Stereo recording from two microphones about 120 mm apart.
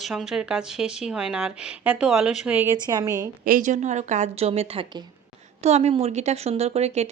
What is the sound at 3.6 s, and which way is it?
A woman's voice, 90° right.